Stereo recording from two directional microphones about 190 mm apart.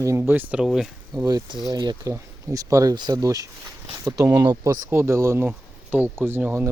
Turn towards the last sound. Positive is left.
turn(degrees=-10)  # may be behind; listen again after turning